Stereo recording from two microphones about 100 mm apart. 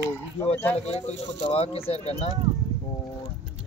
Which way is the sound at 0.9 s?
90° left.